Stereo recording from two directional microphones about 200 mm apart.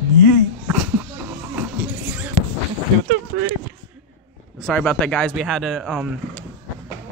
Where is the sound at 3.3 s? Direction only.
60° right (ahead or behind).